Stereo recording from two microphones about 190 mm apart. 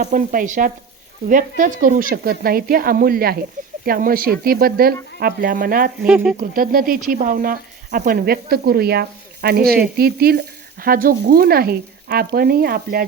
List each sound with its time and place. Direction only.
0.0 s speech: 45° right (ahead or behind)
6.1 s speech: 5° right (ahead or behind)
6.5 s speech: 50° right (ahead or behind)
9.6 s speech: 5° right (ahead or behind)
9.9 s speech: 55° right (ahead or behind)